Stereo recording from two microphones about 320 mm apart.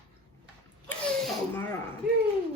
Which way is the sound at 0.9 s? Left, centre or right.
Centre.